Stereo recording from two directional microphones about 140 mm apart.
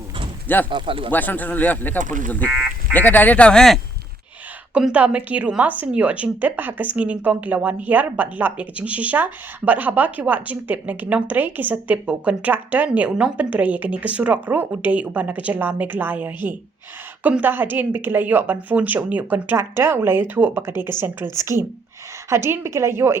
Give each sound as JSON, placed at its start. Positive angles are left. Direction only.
{"t": 0.4, "sound": "speech", "side_deg": 15}
{"t": 0.7, "sound": "speech", "side_deg": -35}
{"t": 1.1, "sound": "speech", "side_deg": 10}
{"t": 2.0, "sound": "speech", "side_deg": -65}
{"t": 2.9, "sound": "speech", "side_deg": 10}
{"t": 4.7, "sound": "a woman's voice", "side_deg": -10}